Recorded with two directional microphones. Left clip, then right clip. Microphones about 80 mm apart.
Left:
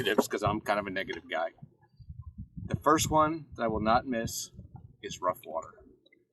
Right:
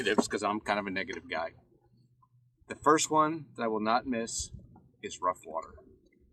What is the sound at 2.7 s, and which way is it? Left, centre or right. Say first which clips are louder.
Speech: even; right.